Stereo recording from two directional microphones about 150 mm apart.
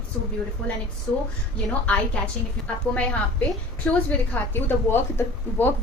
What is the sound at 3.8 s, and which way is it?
A woman's voice, 10° left (ahead or behind).